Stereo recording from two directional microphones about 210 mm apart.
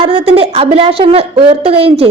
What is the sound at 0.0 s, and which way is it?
A woman's voice, 25° right (ahead or behind).